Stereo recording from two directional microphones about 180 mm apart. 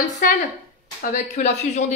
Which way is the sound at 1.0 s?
40° left (ahead or behind).